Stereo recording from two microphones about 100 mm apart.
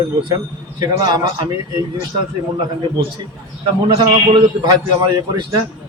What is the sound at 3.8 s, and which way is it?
Speech, 50° right (ahead or behind).